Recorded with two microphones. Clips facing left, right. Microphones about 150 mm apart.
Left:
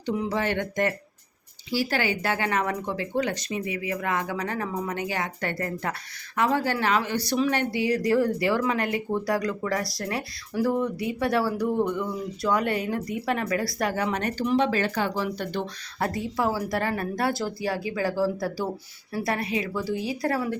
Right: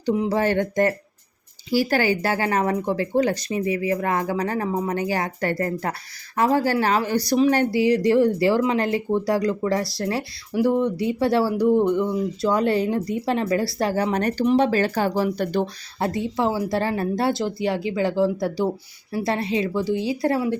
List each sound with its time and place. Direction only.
0.2 s speech: 35° right (ahead or behind)
16.0 s speech: 25° right (ahead or behind)